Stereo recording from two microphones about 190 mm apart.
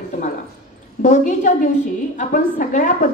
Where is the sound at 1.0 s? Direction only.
40° left (ahead or behind).